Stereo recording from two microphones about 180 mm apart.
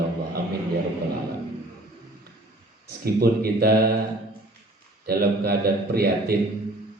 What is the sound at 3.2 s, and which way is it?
Speech, 60° right (ahead or behind).